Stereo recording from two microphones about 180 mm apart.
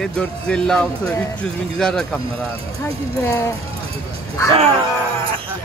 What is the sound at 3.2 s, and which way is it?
Speech, 15° left (ahead or behind).